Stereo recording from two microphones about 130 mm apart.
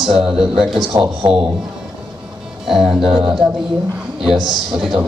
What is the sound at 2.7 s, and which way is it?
Speech, 5° right (ahead or behind).